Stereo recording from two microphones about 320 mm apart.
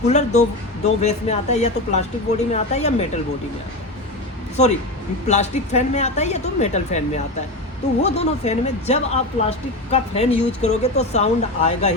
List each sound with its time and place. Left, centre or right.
0.1 s speech: left
4.6 s speech: left